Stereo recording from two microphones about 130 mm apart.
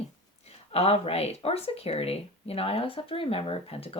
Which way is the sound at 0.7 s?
50° left (ahead or behind).